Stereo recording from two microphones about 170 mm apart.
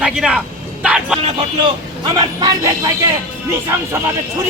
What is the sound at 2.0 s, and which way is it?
Speech, 25° right (ahead or behind).